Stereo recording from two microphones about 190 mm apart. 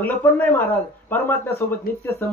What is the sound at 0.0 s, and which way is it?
Speech, 10° left (ahead or behind).